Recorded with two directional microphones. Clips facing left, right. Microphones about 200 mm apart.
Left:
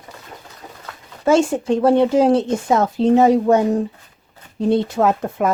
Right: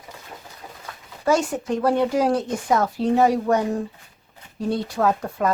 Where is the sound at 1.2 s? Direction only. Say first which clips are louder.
Left 5 dB; 25° left (ahead or behind).